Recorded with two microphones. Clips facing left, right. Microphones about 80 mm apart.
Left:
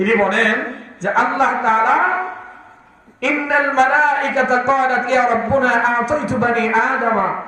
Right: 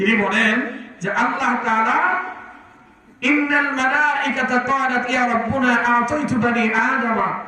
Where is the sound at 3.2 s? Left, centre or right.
Left.